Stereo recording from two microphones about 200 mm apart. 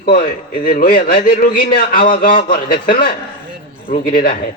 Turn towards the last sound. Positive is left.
turn(degrees=45)  # may be behind; listen again after turning